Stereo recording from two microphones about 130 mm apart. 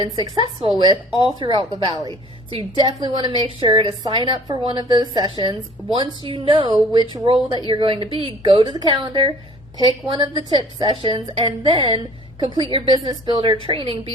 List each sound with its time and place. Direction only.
0.8 s a woman's voice: 40° right (ahead or behind)